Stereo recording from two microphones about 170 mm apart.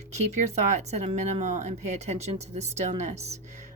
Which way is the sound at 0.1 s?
40° right (ahead or behind).